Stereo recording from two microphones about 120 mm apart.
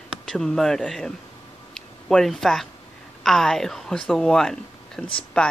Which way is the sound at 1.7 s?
5° left (ahead or behind).